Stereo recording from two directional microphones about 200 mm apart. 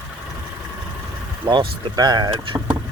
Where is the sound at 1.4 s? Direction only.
25° right (ahead or behind).